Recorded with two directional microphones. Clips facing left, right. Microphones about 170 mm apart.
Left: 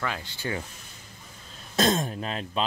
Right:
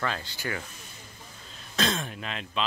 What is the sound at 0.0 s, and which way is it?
Speech, 15° left (ahead or behind).